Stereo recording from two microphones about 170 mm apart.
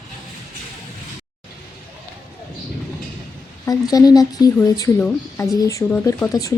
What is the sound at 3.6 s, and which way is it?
Speech, 20° left (ahead or behind).